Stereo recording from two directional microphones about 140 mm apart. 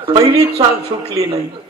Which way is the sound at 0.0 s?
40° right (ahead or behind).